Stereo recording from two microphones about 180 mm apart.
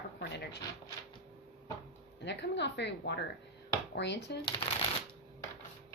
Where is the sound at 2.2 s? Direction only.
75° left (ahead or behind).